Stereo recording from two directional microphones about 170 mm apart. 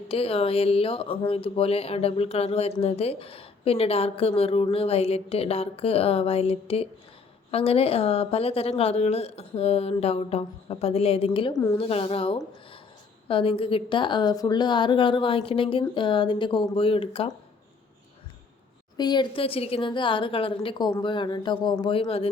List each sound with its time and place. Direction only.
0.1 s a woman's voice: 35° left (ahead or behind)
18.9 s a woman's voice: 25° left (ahead or behind)